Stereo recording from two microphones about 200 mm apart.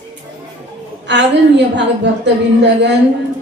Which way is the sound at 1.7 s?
60° right (ahead or behind).